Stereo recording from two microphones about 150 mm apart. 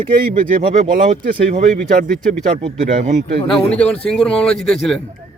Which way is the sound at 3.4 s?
5° left (ahead or behind).